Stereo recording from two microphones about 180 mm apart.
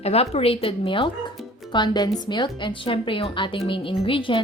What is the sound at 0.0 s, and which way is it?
A woman's voice, 35° left (ahead or behind).